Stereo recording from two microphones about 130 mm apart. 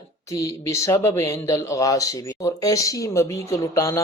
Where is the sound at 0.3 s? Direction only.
25° left (ahead or behind).